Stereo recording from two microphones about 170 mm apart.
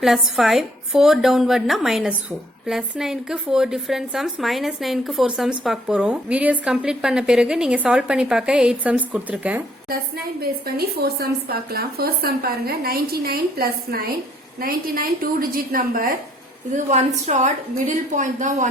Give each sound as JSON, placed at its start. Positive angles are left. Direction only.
{"t": 0.0, "sound": "a woman's voice", "side_deg": 0}
{"t": 10.8, "sound": "a woman's voice", "side_deg": -65}
{"t": 16.7, "sound": "a woman's voice", "side_deg": -45}